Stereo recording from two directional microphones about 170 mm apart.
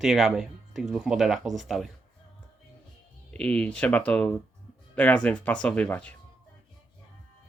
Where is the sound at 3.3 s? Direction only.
5° left (ahead or behind).